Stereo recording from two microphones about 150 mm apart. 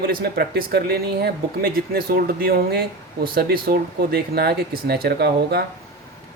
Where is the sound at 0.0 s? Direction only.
80° right.